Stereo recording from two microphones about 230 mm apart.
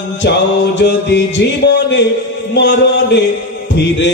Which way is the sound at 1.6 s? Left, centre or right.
Left.